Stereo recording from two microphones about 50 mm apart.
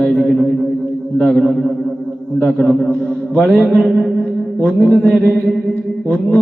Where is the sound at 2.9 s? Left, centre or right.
Left.